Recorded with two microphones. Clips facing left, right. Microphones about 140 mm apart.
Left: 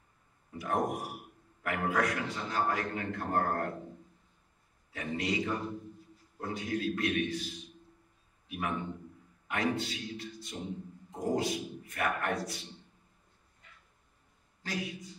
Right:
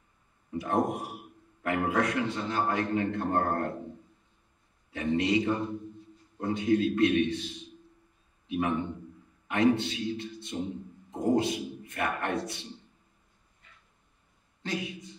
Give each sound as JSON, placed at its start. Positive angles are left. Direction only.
{"t": 0.6, "sound": "a man's voice", "side_deg": -25}
{"t": 4.9, "sound": "a man's voice", "side_deg": -25}
{"t": 14.6, "sound": "a man's voice", "side_deg": -25}